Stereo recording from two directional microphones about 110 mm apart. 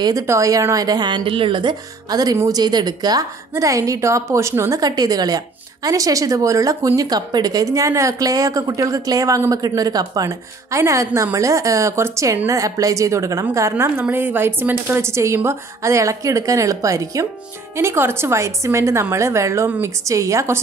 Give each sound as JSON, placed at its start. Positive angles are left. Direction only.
{"t": 0.0, "sound": "a woman's voice", "side_deg": -30}